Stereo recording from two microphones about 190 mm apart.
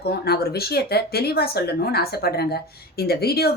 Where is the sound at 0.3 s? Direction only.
55° left (ahead or behind).